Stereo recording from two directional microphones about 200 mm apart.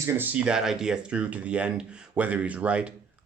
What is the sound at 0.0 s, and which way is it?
Speech, 10° right (ahead or behind).